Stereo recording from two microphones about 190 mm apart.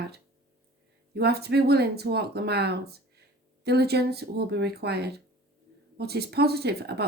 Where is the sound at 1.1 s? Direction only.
55° right (ahead or behind).